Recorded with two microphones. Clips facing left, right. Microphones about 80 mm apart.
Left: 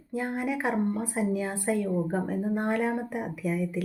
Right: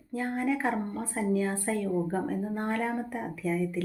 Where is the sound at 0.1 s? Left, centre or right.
Centre.